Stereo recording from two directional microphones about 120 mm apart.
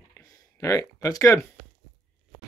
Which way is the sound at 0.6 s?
25° left (ahead or behind).